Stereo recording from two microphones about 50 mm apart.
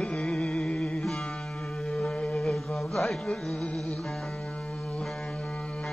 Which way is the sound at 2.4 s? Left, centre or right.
Centre.